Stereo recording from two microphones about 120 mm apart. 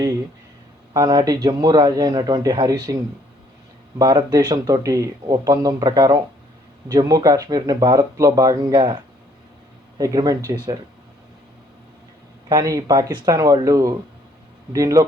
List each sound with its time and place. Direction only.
0.9 s speech: 30° right (ahead or behind)
10.0 s speech: 30° right (ahead or behind)
12.5 s speech: 30° right (ahead or behind)